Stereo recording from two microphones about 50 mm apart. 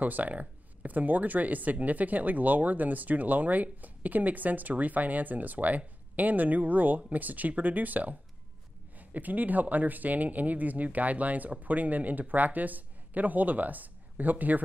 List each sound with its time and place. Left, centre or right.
0.0 s speech: right